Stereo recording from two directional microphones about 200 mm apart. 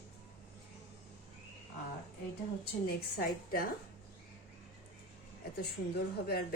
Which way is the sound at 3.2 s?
45° left (ahead or behind).